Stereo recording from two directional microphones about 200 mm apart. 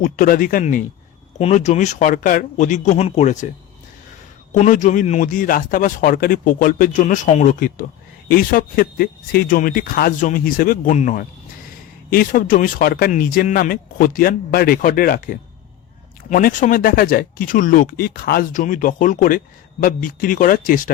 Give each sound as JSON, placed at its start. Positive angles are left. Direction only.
{"t": 0.0, "sound": "speech", "side_deg": 45}
{"t": 4.5, "sound": "speech", "side_deg": 40}